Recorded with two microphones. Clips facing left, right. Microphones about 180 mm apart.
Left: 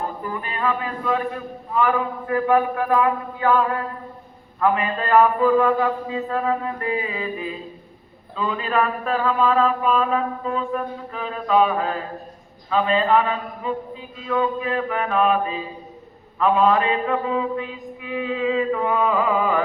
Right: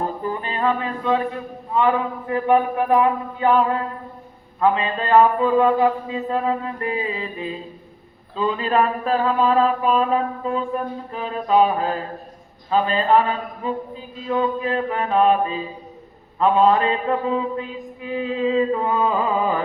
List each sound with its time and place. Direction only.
0.2 s music: 30° right (ahead or behind)
1.7 s mantra: 25° right (ahead or behind)